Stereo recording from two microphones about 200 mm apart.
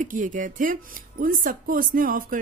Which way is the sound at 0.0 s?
40° right (ahead or behind).